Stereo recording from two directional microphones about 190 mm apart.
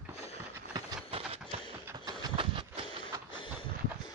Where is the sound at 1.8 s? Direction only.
20° right (ahead or behind).